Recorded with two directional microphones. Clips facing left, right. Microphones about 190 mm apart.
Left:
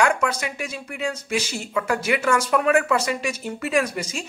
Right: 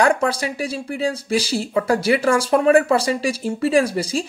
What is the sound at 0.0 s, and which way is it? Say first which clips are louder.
Speech: right 4 dB; 35° right (ahead or behind).